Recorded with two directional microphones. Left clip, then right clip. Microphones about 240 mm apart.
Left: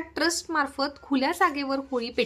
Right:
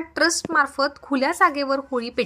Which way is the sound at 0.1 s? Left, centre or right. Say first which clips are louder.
Right 6 dB; centre.